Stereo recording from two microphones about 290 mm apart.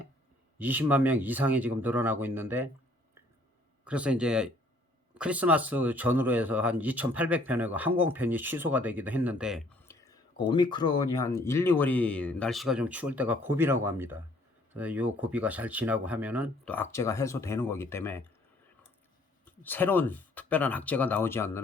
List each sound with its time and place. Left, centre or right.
0.6 s speech: centre
3.8 s speech: centre
9.8 s a sound: centre
10.4 s speech: centre
16.7 s speech: centre
19.5 s speech: centre